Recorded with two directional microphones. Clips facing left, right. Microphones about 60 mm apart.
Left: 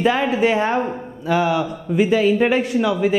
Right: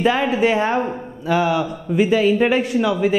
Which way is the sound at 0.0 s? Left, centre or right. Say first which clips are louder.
Even; centre.